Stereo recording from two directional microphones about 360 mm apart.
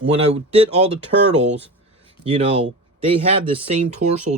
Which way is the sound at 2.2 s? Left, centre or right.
Centre.